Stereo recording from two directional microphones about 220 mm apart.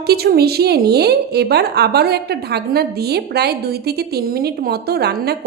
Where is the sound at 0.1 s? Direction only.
45° right (ahead or behind).